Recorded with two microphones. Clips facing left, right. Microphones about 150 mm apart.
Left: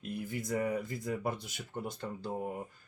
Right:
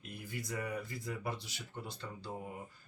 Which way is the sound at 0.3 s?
50° left (ahead or behind).